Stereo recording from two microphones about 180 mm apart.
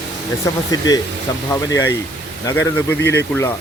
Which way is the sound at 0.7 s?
20° left (ahead or behind).